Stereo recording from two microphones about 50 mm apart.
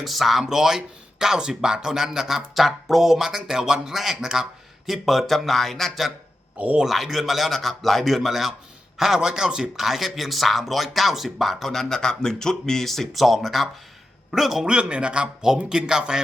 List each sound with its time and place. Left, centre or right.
0.0 s speech: centre
6.6 s speech: right
6.8 s a man's voice: centre
14.7 s speech: right